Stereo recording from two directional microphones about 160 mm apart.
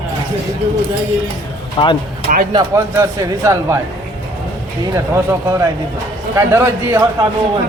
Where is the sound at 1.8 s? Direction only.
30° left (ahead or behind).